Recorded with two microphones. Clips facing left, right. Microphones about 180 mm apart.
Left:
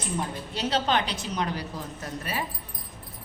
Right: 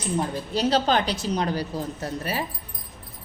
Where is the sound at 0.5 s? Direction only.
35° right (ahead or behind).